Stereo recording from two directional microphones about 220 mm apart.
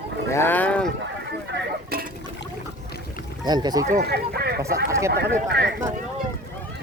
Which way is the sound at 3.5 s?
20° right (ahead or behind).